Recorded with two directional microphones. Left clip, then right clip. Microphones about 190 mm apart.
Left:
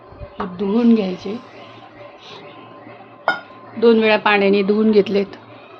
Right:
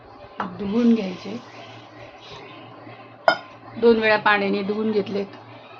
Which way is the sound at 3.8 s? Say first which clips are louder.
Left 3 dB; 45° left (ahead or behind).